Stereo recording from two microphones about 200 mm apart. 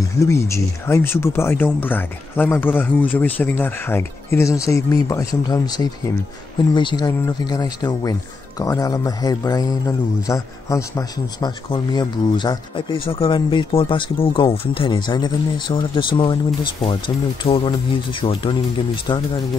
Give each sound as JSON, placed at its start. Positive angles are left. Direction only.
{"t": 0.2, "sound": "speech", "side_deg": 15}
{"t": 17.4, "sound": "speech", "side_deg": 30}